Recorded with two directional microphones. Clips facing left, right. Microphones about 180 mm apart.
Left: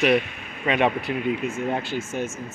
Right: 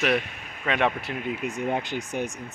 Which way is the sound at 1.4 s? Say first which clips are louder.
Left 1 dB; 15° right (ahead or behind).